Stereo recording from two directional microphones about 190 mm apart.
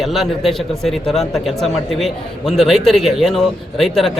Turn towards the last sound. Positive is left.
turn(degrees=0)  # may be behind; listen again after turning